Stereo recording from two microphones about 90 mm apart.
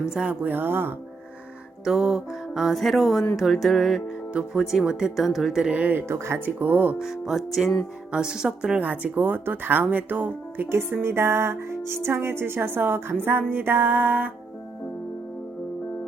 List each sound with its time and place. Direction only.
0.0 s a woman's voice: 10° right (ahead or behind)
1.8 s speech: 5° right (ahead or behind)
5.7 s a woman's voice: 20° right (ahead or behind)
7.0 s a woman's voice: 5° right (ahead or behind); by 14.3 s 20° right (ahead or behind)